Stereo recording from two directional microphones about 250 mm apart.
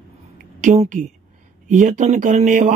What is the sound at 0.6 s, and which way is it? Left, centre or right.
A woman's voice, right.